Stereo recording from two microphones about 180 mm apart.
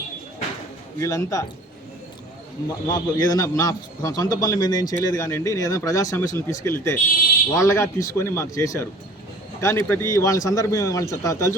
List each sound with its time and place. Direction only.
0.9 s a man's voice: 15° left (ahead or behind)
2.8 s a man's voice: 20° left (ahead or behind)